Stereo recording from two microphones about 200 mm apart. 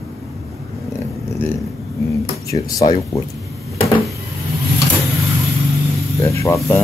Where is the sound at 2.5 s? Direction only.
15° left (ahead or behind).